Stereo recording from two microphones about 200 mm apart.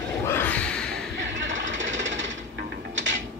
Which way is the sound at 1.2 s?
65° right (ahead or behind).